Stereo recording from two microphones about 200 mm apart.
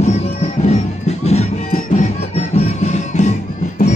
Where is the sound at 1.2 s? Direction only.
35° left (ahead or behind).